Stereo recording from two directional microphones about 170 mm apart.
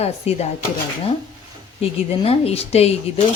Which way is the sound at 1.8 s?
35° left (ahead or behind).